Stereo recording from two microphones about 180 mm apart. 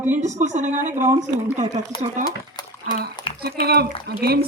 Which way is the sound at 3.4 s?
60° right (ahead or behind).